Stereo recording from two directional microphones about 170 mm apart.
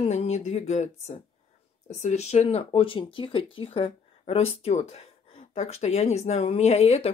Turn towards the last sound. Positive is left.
turn(degrees=40)  # may be behind; listen again after turning